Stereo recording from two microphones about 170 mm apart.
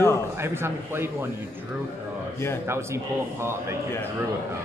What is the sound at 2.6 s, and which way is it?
Speech, 15° right (ahead or behind).